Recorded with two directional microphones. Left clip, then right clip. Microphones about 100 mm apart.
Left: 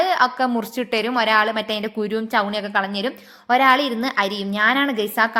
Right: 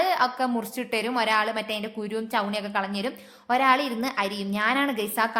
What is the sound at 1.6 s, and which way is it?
A woman's voice, 50° left (ahead or behind).